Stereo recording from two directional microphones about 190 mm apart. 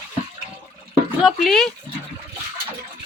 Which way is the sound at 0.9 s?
Centre (ahead or behind).